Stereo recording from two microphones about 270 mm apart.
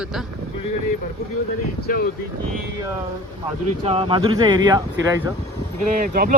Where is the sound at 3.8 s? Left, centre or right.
Centre.